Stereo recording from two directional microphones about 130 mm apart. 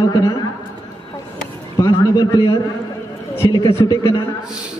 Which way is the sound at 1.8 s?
25° left (ahead or behind).